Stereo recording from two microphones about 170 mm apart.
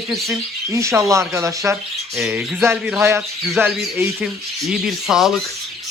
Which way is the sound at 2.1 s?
5° right (ahead or behind).